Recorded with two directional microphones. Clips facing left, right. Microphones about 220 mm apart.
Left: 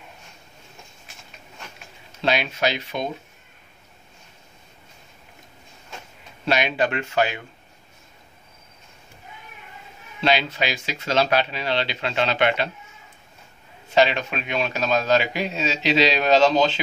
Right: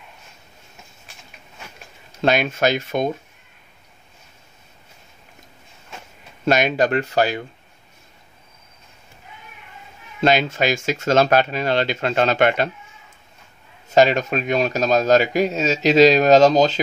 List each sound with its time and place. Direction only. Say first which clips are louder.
2.2 s a man's voice: right 5 dB; 50° right (ahead or behind)
6.4 s speech: right 4 dB; 45° right (ahead or behind)
10.2 s a man's voice: right 5 dB; 45° right (ahead or behind)
13.9 s a man's voice: right 4 dB; 45° right (ahead or behind)